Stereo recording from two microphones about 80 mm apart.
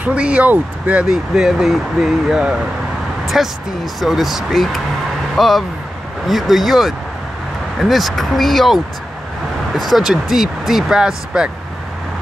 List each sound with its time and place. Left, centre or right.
0.0 s speech: centre
1.0 s speech: centre